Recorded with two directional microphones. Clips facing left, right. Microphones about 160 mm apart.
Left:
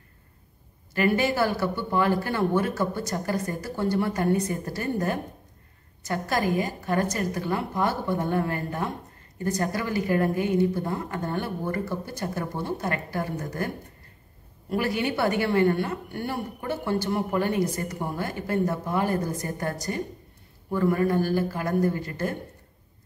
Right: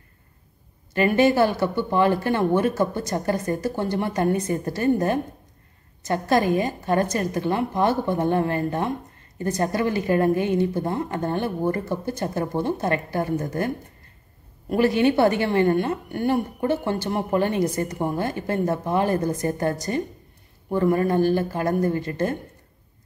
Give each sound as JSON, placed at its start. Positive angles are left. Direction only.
{"t": 0.9, "sound": "a woman's voice", "side_deg": -25}
{"t": 14.7, "sound": "a woman's voice", "side_deg": -25}